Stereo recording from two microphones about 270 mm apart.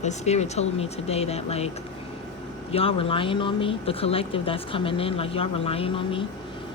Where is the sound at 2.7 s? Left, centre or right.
Centre.